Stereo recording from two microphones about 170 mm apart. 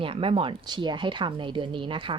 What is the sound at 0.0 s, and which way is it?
Speech, 30° right (ahead or behind).